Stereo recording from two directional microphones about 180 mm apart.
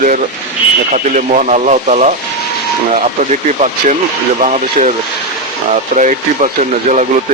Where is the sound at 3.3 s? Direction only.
40° right (ahead or behind).